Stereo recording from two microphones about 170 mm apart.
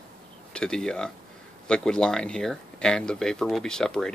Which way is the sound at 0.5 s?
5° left (ahead or behind).